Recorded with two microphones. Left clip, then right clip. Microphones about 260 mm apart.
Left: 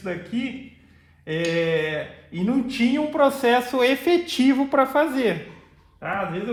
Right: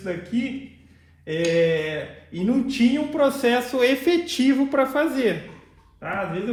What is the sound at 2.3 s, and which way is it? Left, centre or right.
Speech, left.